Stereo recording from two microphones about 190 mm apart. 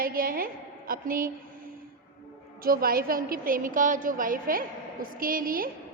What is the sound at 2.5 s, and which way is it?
A woman's voice, 50° right (ahead or behind).